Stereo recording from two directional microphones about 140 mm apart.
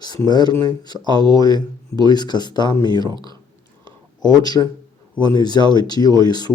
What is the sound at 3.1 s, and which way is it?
Speech, 30° right (ahead or behind).